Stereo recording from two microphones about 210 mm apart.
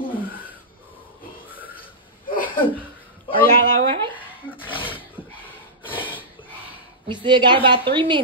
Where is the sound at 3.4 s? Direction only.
45° left (ahead or behind).